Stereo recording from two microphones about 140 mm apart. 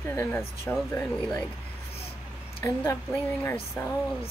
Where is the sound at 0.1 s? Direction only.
20° left (ahead or behind).